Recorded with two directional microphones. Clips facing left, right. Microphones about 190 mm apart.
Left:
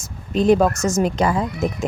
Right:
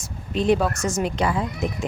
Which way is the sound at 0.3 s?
45° left (ahead or behind).